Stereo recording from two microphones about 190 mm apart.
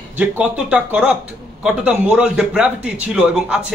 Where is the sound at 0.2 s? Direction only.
5° right (ahead or behind).